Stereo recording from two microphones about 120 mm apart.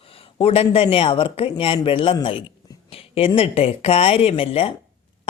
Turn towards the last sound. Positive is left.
turn(degrees=55)  # may be behind; listen again after turning